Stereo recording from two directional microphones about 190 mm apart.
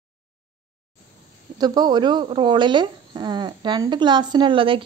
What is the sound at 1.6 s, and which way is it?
Speech, 20° right (ahead or behind).